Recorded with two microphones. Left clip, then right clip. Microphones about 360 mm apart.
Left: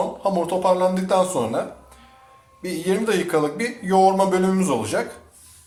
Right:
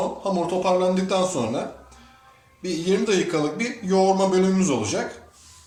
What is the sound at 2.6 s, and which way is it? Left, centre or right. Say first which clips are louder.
Speech: even; left.